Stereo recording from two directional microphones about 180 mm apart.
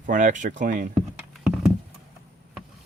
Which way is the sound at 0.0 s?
45° right (ahead or behind).